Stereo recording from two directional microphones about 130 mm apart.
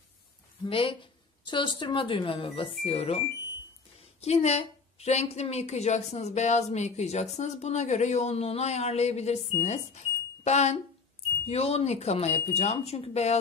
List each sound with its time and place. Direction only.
0.7 s a woman's voice: 45° left (ahead or behind)
4.2 s a woman's voice: 55° left (ahead or behind)